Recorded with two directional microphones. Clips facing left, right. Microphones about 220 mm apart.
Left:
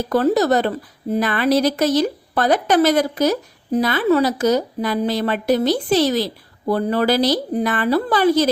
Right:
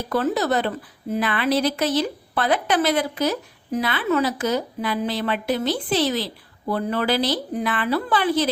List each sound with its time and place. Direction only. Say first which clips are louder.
0.1 s a woman's voice: left 5 dB; 40° left (ahead or behind)